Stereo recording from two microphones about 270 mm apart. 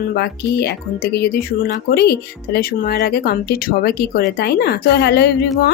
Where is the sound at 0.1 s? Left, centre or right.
Left.